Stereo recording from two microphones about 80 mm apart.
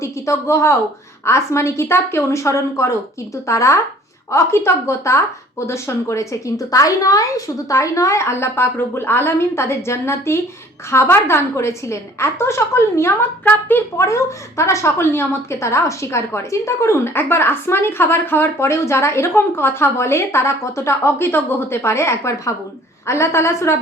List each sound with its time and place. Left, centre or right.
0.0 s a woman's voice: left